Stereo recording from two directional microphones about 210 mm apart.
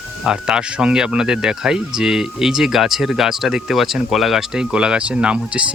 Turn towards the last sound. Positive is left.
turn(degrees=-5)  # may be behind; listen again after turning